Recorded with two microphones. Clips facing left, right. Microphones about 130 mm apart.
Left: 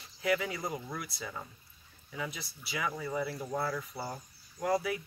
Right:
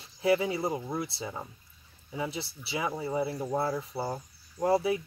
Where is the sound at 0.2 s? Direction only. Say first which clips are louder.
Right 6 dB; 30° right (ahead or behind).